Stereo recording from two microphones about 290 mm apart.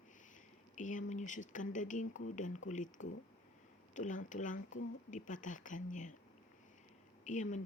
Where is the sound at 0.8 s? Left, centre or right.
Left.